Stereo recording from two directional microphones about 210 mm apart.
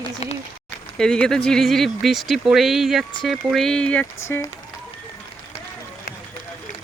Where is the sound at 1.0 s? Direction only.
5° left (ahead or behind).